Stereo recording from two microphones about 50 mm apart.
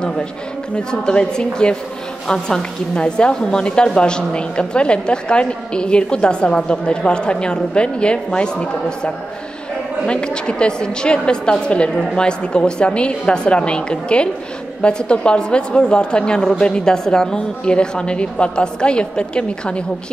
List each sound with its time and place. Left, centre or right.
0.7 s a woman's voice: centre